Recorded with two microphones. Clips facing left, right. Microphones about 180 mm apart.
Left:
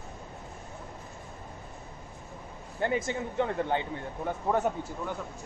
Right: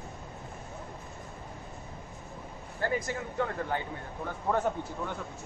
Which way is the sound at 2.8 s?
20° left (ahead or behind).